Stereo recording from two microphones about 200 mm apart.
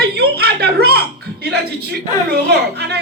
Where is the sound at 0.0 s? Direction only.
55° right (ahead or behind).